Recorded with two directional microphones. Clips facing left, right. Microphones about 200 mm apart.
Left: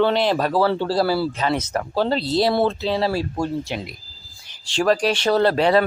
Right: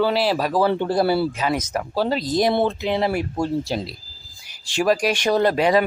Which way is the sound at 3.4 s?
35° right (ahead or behind).